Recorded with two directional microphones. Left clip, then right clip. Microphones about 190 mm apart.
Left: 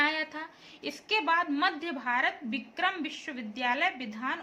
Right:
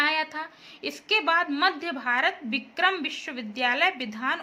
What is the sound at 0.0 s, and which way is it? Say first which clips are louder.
A woman's voice: right 4 dB; 20° right (ahead or behind).